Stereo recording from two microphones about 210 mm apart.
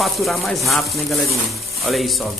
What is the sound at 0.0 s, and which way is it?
Speech, centre (ahead or behind).